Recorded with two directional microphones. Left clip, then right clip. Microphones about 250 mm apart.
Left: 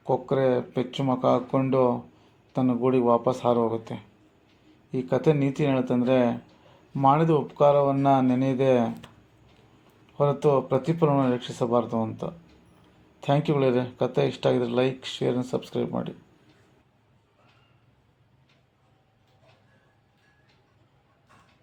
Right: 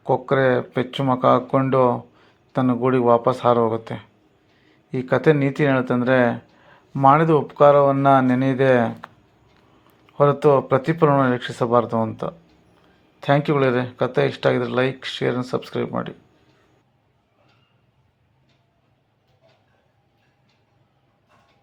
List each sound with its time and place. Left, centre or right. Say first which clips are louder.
0.0 s speech: right 5 dB; centre
10.2 s speech: right 6 dB; centre
13.1 s a sound: right 6 dB; right
13.6 s speech: right 4 dB; centre